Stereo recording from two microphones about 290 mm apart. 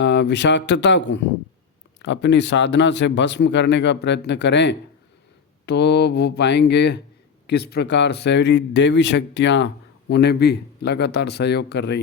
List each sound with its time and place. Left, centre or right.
0.0 s speech: left